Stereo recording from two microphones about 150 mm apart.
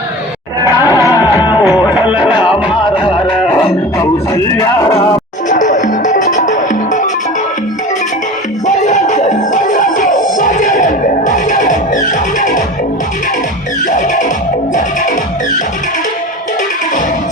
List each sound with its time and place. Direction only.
1.2 s music: 15° right (ahead or behind)
1.6 s music: 25° left (ahead or behind)
2.0 s music: 10° right (ahead or behind)
3.0 s music: 35° left (ahead or behind)
3.9 s a sound: 20° left (ahead or behind)
5.5 s music: 55° left (ahead or behind)
8.6 s music: 55° left (ahead or behind)
13.8 s music: 55° left (ahead or behind)